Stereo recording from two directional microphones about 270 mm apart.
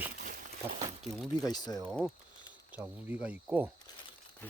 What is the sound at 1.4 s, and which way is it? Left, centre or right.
Speech, centre.